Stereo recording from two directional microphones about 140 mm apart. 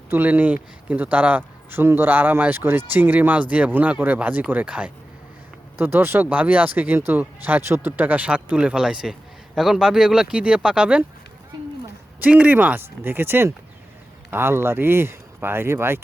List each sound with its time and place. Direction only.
0.1 s speech: 15° right (ahead or behind)
12.2 s speech: 10° right (ahead or behind)